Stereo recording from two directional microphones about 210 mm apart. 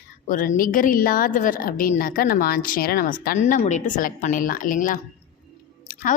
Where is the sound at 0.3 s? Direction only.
40° left (ahead or behind).